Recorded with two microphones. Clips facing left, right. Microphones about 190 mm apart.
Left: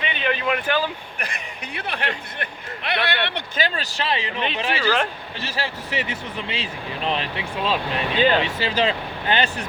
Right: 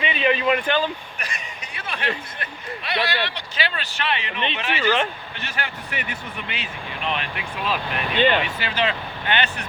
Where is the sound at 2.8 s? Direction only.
55° left (ahead or behind).